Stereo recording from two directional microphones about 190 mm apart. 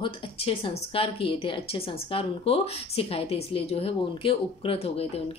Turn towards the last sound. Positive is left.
turn(degrees=30)  # may be behind; listen again after turning